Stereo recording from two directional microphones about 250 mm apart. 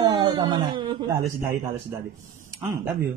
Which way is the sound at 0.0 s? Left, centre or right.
Centre.